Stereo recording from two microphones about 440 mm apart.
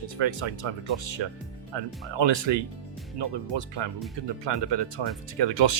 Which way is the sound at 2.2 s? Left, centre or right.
Right.